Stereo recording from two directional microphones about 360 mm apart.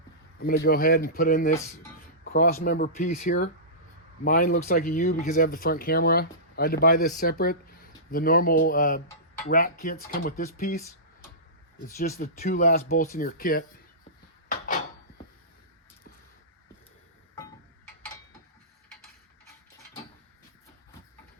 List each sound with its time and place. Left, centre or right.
0.3 s speech: left
11.9 s speech: left